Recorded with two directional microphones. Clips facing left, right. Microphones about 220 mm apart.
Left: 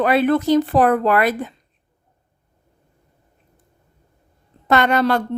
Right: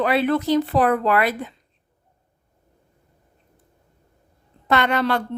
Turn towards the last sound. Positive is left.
turn(degrees=45)  # may be behind; listen again after turning